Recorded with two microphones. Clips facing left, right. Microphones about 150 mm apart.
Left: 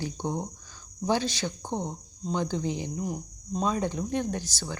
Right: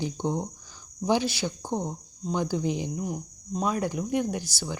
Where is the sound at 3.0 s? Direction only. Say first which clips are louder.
Even; centre (ahead or behind).